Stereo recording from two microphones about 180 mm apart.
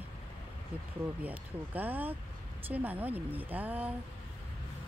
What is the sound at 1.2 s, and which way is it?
Speech, 10° right (ahead or behind).